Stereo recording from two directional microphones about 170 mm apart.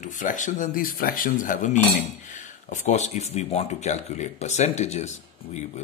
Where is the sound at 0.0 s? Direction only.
50° left (ahead or behind).